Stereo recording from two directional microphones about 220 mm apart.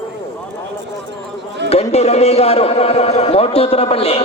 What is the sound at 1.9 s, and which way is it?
A man's voice, 30° left (ahead or behind).